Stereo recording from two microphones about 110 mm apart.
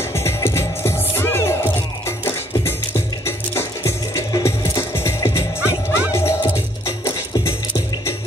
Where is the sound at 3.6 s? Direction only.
25° left (ahead or behind).